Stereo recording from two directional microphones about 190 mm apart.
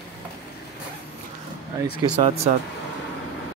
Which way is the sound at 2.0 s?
30° right (ahead or behind).